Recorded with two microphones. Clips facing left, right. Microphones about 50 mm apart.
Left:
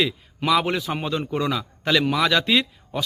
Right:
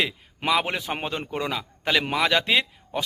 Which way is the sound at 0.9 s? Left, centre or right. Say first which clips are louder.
Left 4 dB; right.